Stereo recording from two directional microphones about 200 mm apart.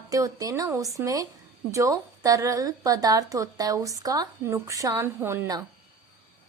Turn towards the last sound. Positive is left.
turn(degrees=-15)  # may be behind; listen again after turning